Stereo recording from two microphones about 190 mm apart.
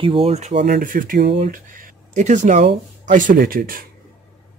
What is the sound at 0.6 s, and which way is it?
Speech, 50° right (ahead or behind).